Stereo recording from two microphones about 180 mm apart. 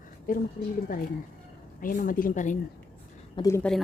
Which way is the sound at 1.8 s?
50° left (ahead or behind).